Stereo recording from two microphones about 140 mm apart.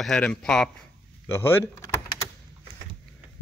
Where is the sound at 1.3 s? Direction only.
15° left (ahead or behind).